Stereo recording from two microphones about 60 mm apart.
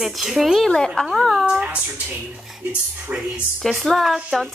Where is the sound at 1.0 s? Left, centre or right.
Centre.